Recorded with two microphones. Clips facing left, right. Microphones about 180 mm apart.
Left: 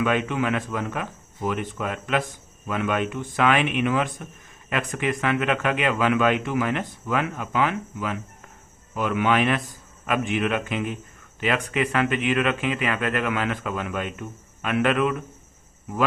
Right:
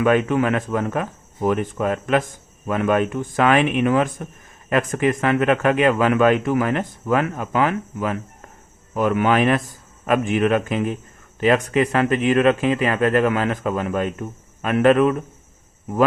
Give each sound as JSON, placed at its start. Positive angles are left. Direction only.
{"t": 0.0, "sound": "speech", "side_deg": -45}